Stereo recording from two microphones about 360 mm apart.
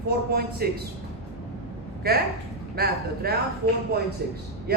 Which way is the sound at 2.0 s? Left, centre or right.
Right.